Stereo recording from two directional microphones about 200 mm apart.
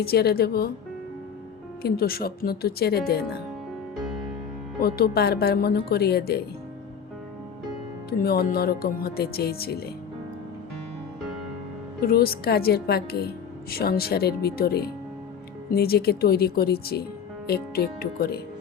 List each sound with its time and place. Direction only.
0.0 s a woman's voice: 50° left (ahead or behind)
1.8 s a woman's voice: 50° left (ahead or behind)
4.8 s a woman's voice: 50° left (ahead or behind)
8.2 s a woman's voice: 50° left (ahead or behind)
12.0 s a woman's voice: 50° left (ahead or behind)